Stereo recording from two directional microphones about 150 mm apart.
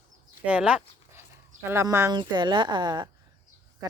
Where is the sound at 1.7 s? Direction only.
20° right (ahead or behind).